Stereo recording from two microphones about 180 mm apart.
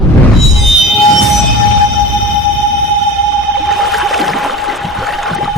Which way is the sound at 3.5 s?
Centre (ahead or behind).